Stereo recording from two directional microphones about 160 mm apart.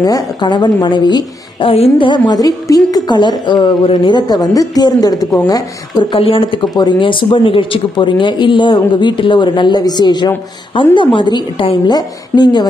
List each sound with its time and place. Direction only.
0.0 s a man's voice: 25° left (ahead or behind)